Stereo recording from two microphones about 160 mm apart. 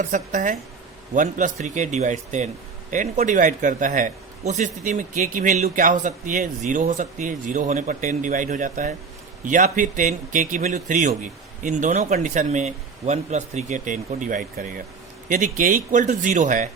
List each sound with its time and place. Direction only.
0.0 s a man's voice: 55° right (ahead or behind)